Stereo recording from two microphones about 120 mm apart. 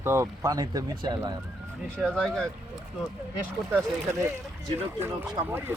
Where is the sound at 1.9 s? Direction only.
5° left (ahead or behind).